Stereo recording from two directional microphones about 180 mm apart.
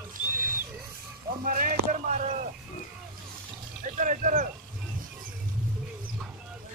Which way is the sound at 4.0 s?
45° right (ahead or behind).